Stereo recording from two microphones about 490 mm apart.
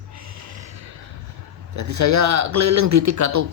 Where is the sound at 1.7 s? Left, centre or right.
Right.